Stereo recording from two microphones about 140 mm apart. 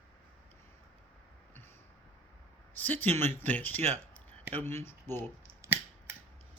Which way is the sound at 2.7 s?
10° left (ahead or behind).